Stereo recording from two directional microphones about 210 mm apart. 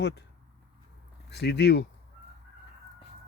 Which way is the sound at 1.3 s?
55° left (ahead or behind).